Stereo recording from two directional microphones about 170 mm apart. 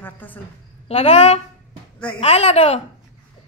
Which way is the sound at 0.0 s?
10° left (ahead or behind).